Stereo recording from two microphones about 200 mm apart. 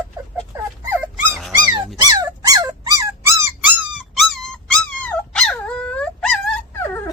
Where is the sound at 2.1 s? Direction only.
15° right (ahead or behind); by 6.6 s 5° left (ahead or behind).